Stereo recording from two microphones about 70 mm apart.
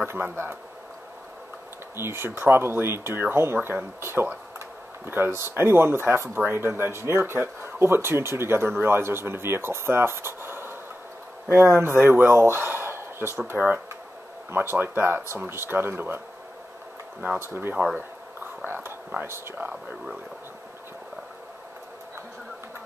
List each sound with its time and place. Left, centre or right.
0.1 s speech: right
2.0 s speech: right
13.5 s speech: centre
14.5 s speech: right
17.4 s speech: right
18.7 s a sound: right